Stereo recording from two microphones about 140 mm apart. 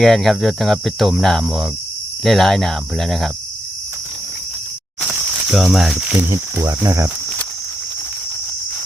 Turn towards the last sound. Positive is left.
turn(degrees=-20)  # may be behind; listen again after turning